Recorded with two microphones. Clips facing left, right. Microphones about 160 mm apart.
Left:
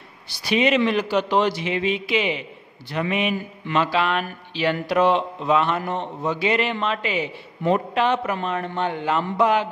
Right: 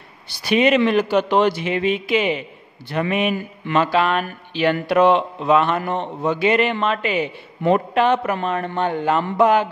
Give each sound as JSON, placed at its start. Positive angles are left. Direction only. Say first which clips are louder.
{"t": 0.3, "sound": "a man's voice", "louder": "right 3 dB", "side_deg": -55}